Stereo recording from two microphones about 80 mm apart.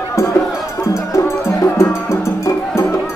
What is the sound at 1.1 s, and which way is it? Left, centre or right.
Music, left.